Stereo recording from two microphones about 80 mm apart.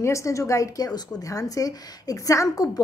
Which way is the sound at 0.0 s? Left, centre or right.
Left.